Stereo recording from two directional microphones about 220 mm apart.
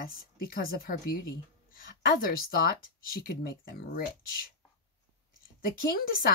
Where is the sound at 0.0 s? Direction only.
40° left (ahead or behind).